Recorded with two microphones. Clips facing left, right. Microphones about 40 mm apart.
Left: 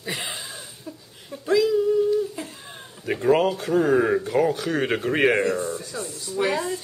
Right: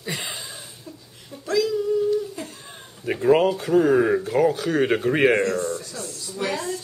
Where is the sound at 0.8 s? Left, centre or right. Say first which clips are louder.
Left 2 dB; centre.